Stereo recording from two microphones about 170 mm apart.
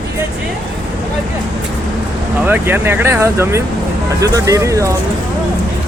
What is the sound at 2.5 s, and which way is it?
Speech, 15° right (ahead or behind).